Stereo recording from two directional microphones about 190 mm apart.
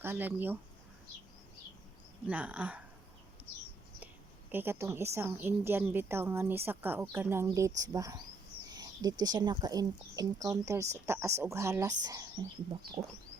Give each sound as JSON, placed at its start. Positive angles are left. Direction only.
{"t": 0.0, "sound": "a woman's voice", "side_deg": -10}
{"t": 2.2, "sound": "a woman's voice", "side_deg": -5}
{"t": 4.5, "sound": "a woman's voice", "side_deg": -10}